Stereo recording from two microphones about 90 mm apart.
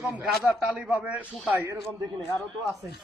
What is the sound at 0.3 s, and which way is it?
A man's voice, 10° right (ahead or behind).